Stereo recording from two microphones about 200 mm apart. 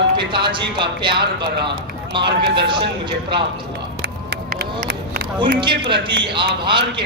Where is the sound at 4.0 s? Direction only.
55° right (ahead or behind).